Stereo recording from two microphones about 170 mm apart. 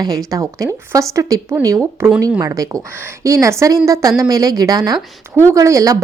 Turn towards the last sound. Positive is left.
turn(degrees=-20)  # may be behind; listen again after turning